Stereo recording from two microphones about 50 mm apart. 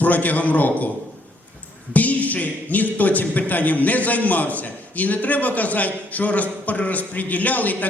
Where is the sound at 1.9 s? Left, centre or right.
Left.